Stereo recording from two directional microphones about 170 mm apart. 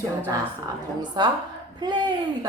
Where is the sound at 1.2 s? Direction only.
25° right (ahead or behind).